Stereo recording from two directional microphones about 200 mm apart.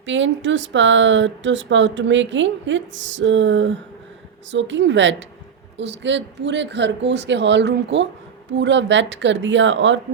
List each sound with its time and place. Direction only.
0.0 s speech: 65° right (ahead or behind)